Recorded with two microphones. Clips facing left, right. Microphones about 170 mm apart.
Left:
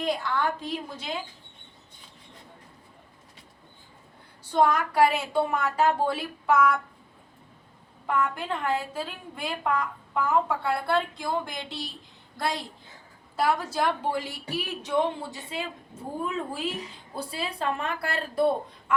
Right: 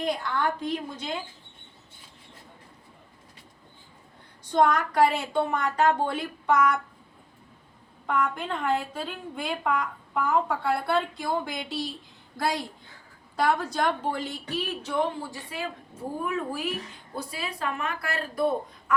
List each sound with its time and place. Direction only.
0.0 s a woman's voice: centre (ahead or behind)
4.5 s a woman's voice: 5° left (ahead or behind)
8.0 s a woman's voice: 5° left (ahead or behind)
13.3 s a woman's voice: centre (ahead or behind); by 18.9 s 30° left (ahead or behind)